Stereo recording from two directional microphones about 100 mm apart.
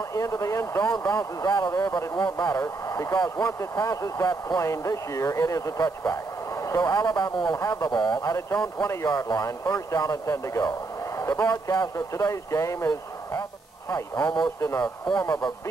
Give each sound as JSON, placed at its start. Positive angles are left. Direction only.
{"t": 0.1, "sound": "a man's voice", "side_deg": 35}
{"t": 11.5, "sound": "speech", "side_deg": 40}
{"t": 14.6, "sound": "speech", "side_deg": 35}
{"t": 15.1, "sound": "speech", "side_deg": 45}